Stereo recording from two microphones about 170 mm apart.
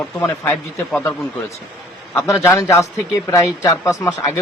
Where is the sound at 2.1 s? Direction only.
15° left (ahead or behind).